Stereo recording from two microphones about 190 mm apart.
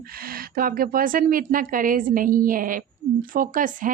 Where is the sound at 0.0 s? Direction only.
50° right (ahead or behind).